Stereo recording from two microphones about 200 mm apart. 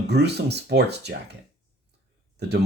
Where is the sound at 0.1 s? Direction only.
55° right (ahead or behind).